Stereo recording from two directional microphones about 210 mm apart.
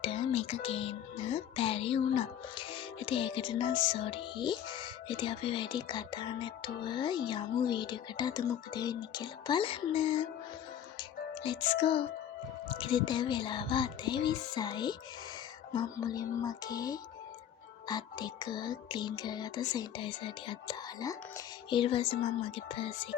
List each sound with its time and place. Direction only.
0.0 s speech: 25° left (ahead or behind)
11.4 s speech: 25° left (ahead or behind)